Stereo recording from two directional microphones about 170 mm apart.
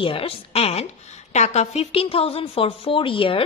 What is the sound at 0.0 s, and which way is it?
A woman's voice, 35° left (ahead or behind).